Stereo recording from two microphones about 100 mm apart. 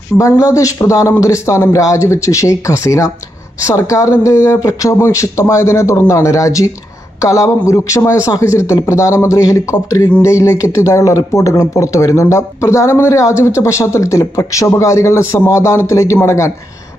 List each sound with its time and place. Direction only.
0.1 s speech: 30° left (ahead or behind)